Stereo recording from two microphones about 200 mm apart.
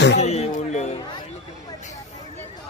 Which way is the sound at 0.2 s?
30° left (ahead or behind).